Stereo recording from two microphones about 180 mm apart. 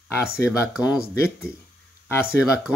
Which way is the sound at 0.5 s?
5° right (ahead or behind).